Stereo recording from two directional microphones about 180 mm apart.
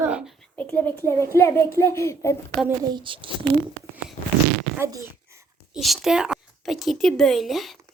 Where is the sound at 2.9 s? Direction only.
25° right (ahead or behind).